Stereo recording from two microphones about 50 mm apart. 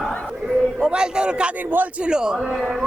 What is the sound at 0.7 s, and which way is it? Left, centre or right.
Speech, centre.